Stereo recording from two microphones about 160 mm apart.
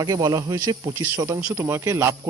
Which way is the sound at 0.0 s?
25° right (ahead or behind).